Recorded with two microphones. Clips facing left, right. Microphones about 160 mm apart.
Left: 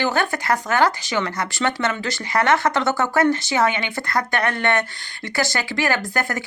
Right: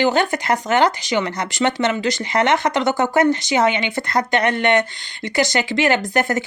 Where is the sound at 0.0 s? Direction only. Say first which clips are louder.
Right 4 dB; 20° right (ahead or behind).